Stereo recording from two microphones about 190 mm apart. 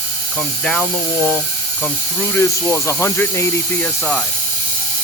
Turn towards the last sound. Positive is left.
turn(degrees=15)  # may be behind; listen again after turning